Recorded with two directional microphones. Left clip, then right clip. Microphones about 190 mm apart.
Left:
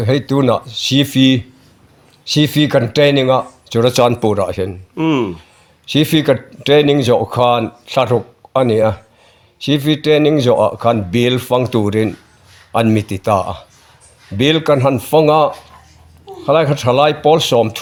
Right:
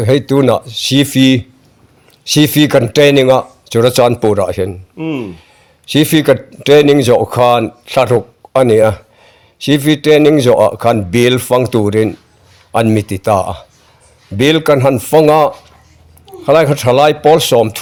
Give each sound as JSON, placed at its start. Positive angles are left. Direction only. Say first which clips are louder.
{"t": 0.0, "sound": "a man's voice", "louder": "right 4 dB", "side_deg": -25}
{"t": 4.9, "sound": "speech", "louder": "left 5 dB", "side_deg": 50}
{"t": 5.8, "sound": "a man's voice", "louder": "right 3 dB", "side_deg": -25}